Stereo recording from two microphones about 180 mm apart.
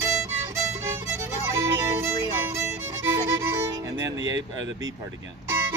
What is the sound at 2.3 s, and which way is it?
Speech, 15° right (ahead or behind).